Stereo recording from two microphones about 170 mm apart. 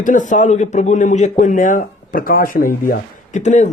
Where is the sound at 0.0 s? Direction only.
50° left (ahead or behind).